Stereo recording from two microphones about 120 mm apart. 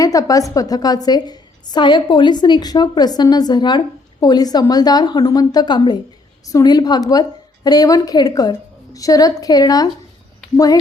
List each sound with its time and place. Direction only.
0.0 s a woman's voice: 30° left (ahead or behind)